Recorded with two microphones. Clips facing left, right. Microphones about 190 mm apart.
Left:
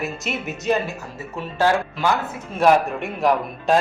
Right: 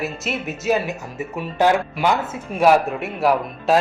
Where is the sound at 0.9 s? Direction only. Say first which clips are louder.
Right 4 dB; 15° right (ahead or behind).